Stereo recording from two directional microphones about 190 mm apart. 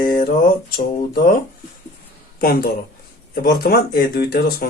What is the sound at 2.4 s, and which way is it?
Speech, 50° left (ahead or behind).